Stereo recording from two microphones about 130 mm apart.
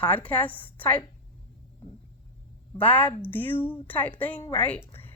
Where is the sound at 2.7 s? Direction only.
10° left (ahead or behind).